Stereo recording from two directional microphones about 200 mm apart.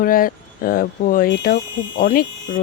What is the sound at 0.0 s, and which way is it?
Speech, 45° left (ahead or behind).